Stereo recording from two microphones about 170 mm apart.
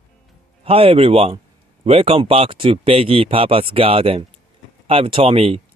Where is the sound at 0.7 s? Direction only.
35° right (ahead or behind).